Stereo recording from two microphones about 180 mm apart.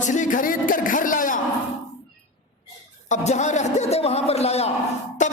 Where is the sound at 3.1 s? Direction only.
40° left (ahead or behind).